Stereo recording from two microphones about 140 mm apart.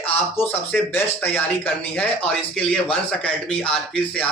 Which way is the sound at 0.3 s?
15° left (ahead or behind).